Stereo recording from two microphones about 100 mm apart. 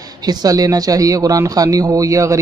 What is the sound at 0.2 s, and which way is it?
Speech, 40° right (ahead or behind).